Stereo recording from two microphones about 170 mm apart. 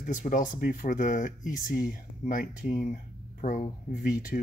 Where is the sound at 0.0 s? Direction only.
50° left (ahead or behind).